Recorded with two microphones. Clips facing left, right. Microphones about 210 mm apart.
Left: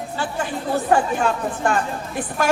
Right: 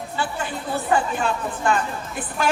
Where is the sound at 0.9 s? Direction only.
45° left (ahead or behind).